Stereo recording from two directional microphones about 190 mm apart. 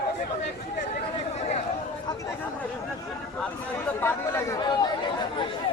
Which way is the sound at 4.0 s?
15° left (ahead or behind).